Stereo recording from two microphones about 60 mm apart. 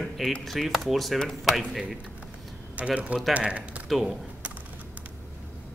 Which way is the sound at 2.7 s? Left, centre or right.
Right.